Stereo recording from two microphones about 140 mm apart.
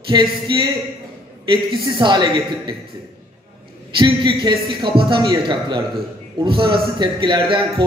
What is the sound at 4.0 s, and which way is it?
A man's voice, 35° right (ahead or behind).